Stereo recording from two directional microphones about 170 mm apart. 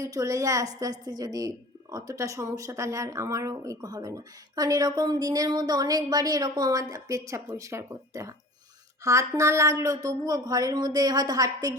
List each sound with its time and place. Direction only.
0.0 s a woman's voice: 20° right (ahead or behind)